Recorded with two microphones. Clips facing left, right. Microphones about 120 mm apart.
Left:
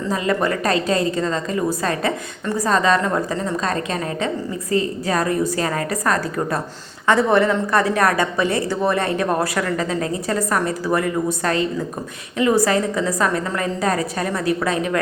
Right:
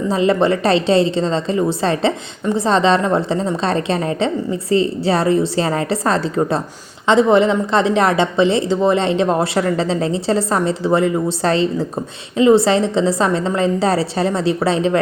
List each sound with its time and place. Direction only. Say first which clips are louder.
0.1 s a woman's voice: right 5 dB; 25° right (ahead or behind)